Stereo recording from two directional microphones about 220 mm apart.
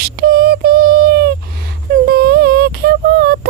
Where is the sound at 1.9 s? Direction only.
45° right (ahead or behind).